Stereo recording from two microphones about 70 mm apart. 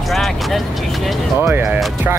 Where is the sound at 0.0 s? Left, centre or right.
Centre.